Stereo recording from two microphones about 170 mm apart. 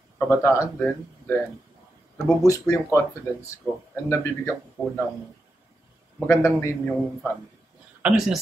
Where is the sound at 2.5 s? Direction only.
20° left (ahead or behind).